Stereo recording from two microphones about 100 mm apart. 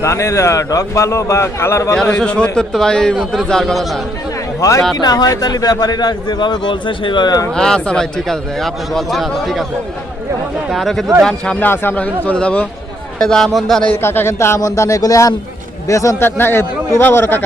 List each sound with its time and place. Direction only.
0.0 s a man's voice: 30° left (ahead or behind)
2.0 s a man's voice: 10° left (ahead or behind)
4.6 s a man's voice: 35° left (ahead or behind)
7.5 s a man's voice: 5° left (ahead or behind)
10.7 s a man's voice: centre (ahead or behind)
11.6 s a man's voice: 20° left (ahead or behind); by 13.8 s centre (ahead or behind)
14.0 s a man's voice: 25° left (ahead or behind)